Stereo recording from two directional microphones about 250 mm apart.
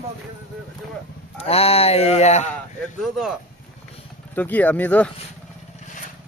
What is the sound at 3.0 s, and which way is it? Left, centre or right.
Speech, centre.